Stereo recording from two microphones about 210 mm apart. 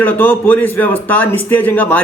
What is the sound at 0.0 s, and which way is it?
Speech, 10° left (ahead or behind).